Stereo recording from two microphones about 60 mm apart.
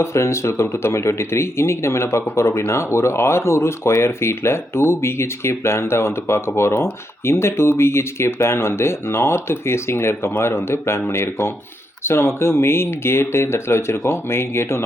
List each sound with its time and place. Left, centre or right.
0.0 s speech: left